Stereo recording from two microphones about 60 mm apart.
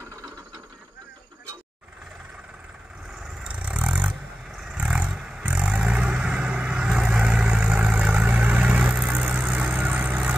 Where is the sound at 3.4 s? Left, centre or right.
Right.